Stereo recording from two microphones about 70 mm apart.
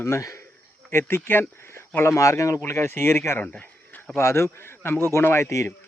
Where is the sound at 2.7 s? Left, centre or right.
Left.